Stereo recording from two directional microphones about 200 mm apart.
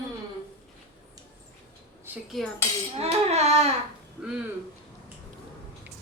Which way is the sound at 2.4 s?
Centre (ahead or behind).